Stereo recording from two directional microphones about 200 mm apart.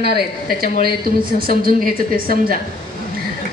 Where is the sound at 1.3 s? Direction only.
45° right (ahead or behind).